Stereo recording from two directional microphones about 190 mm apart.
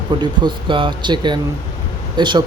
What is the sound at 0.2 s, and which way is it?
Speech, 25° right (ahead or behind).